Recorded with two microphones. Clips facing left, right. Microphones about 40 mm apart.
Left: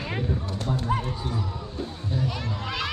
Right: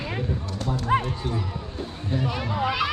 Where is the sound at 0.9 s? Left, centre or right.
Right.